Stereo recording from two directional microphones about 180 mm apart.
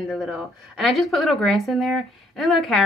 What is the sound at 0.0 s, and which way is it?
Speech, centre (ahead or behind).